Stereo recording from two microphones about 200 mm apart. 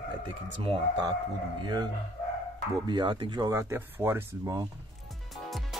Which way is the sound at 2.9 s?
25° right (ahead or behind).